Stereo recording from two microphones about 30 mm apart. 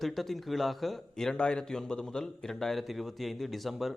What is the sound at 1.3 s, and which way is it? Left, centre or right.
Speech, left.